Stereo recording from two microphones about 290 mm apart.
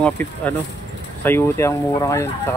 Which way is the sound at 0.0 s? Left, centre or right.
Centre.